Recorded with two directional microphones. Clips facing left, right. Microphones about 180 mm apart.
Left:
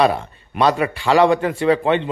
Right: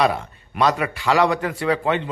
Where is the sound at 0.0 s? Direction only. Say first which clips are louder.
Left 3 dB; 30° left (ahead or behind).